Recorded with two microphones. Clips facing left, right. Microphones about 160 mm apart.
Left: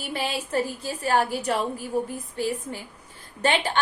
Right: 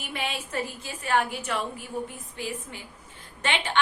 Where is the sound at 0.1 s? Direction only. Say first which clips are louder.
Left 5 dB; 35° left (ahead or behind).